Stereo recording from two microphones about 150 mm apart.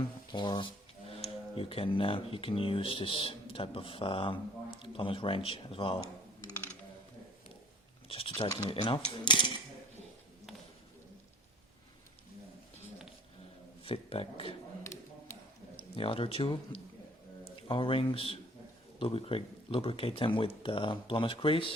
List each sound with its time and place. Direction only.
0.3 s speech: 30° left (ahead or behind)
8.0 s speech: 40° left (ahead or behind)
13.8 s speech: 40° left (ahead or behind)
15.7 s speech: 40° left (ahead or behind)